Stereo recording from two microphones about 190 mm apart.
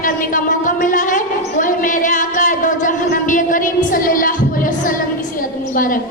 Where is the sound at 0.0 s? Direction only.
45° left (ahead or behind).